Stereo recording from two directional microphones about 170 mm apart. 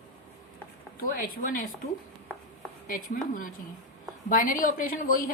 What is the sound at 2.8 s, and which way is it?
A woman's voice, 55° left (ahead or behind).